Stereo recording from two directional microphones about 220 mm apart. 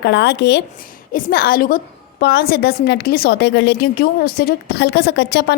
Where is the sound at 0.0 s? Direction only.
50° left (ahead or behind).